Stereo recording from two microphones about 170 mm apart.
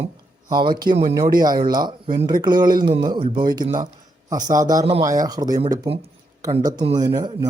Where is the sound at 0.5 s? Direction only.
25° right (ahead or behind).